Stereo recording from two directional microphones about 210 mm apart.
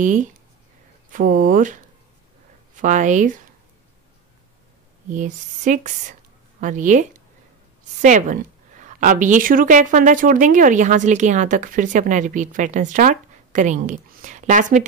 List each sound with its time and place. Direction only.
0.0 s a woman's voice: 35° right (ahead or behind)
5.1 s a woman's voice: 35° right (ahead or behind)